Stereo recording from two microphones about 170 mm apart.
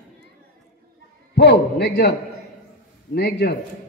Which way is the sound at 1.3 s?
90° left.